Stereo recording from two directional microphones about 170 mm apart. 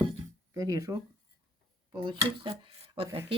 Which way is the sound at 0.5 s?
20° right (ahead or behind).